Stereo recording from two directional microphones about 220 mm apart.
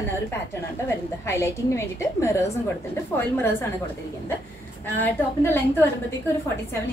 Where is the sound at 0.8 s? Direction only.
15° left (ahead or behind).